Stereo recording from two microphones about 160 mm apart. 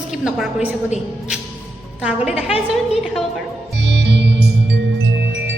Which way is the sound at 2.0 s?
5° right (ahead or behind).